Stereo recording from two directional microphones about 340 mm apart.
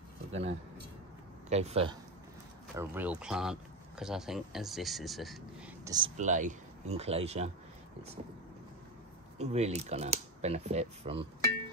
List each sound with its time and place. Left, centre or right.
0.3 s speech: centre
2.7 s speech: centre
5.9 s speech: centre
9.4 s speech: centre